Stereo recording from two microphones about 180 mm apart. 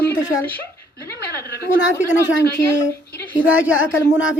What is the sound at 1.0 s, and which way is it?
Dog, 60° left (ahead or behind).